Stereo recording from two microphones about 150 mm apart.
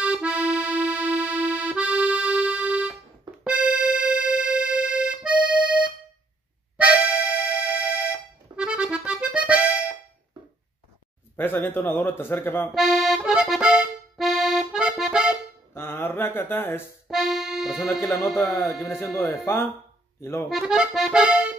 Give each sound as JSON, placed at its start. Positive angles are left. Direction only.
{"t": 0.0, "sound": "accordion", "side_deg": -5}
{"t": 3.4, "sound": "music", "side_deg": -5}
{"t": 6.8, "sound": "accordion", "side_deg": -10}
{"t": 11.3, "sound": "a man's voice", "side_deg": 15}
{"t": 12.7, "sound": "accordion", "side_deg": 0}
{"t": 15.7, "sound": "mantra", "side_deg": 15}
{"t": 17.1, "sound": "accordion", "side_deg": 0}
{"t": 18.8, "sound": "a man's voice", "side_deg": 15}
{"t": 19.0, "sound": "accordion", "side_deg": 0}
{"t": 19.3, "sound": "speech", "side_deg": 20}
{"t": 20.4, "sound": "accordion", "side_deg": -5}